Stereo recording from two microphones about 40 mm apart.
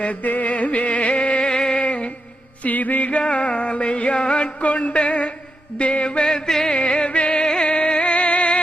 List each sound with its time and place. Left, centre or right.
0.0 s a sound: left
2.6 s music: left
3.2 s music: left
4.6 s music: left
5.7 s mantra: left
6.2 s music: centre
6.7 s music: left